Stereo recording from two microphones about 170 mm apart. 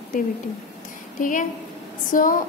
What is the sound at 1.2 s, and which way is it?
A woman's voice, 50° left (ahead or behind).